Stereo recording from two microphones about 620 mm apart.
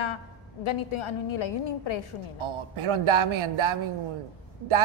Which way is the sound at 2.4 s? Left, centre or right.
Right.